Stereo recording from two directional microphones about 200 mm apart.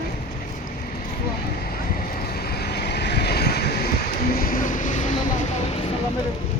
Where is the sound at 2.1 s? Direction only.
50° left (ahead or behind).